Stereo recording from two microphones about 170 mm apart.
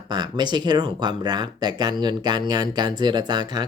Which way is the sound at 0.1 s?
25° right (ahead or behind).